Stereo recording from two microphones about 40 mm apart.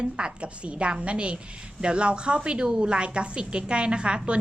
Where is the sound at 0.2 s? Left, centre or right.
Right.